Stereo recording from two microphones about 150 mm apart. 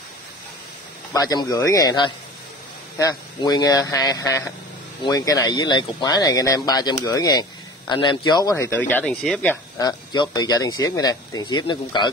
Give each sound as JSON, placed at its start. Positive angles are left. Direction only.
{"t": 1.1, "sound": "speech", "side_deg": 25}
{"t": 9.8, "sound": "speech", "side_deg": 30}